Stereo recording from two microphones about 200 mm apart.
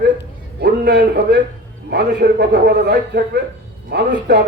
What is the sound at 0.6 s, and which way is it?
A man's voice, 55° right (ahead or behind).